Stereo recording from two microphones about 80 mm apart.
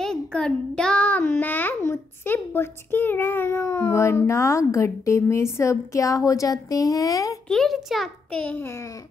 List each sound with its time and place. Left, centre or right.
0.0 s child singing: centre
1.3 s a child's voice: left
7.4 s a child's voice: centre
8.3 s a child's voice: centre